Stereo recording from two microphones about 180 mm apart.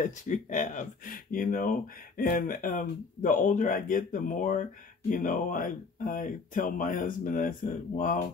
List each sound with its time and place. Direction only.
0.0 s speech: 45° left (ahead or behind)